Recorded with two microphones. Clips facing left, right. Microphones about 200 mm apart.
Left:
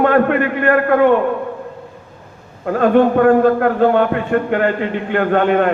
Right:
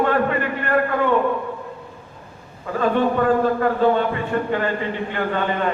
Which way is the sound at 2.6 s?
60° left (ahead or behind).